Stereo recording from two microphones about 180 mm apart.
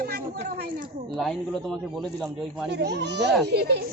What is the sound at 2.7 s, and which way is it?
Speech, 70° right (ahead or behind).